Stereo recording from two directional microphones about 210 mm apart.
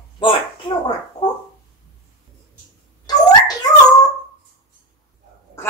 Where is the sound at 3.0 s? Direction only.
20° left (ahead or behind).